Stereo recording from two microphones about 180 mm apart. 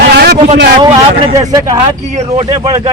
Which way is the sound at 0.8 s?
20° right (ahead or behind).